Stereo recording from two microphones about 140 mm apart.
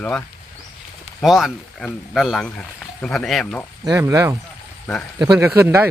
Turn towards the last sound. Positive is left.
turn(degrees=-20)  # may be behind; listen again after turning